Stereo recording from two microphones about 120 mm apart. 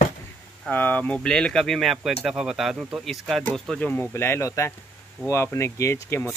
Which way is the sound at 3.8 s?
15° left (ahead or behind).